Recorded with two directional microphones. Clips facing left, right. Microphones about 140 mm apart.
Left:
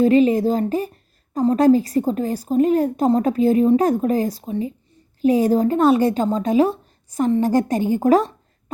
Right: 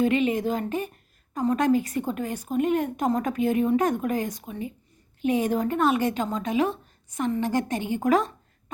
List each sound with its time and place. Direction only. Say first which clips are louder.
0.0 s a woman's voice: left 8 dB; 35° left (ahead or behind)